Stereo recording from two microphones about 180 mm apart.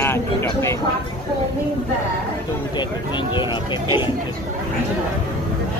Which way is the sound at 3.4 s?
25° left (ahead or behind).